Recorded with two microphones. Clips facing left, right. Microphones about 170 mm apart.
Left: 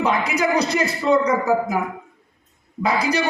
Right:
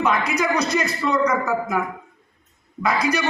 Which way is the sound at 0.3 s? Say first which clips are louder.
Left 2 dB; 30° left (ahead or behind).